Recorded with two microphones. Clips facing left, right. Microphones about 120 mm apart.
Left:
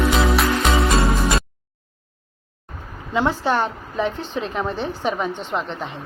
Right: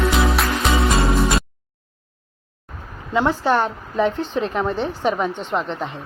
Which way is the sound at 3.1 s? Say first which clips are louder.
Right 2 dB; 20° left (ahead or behind).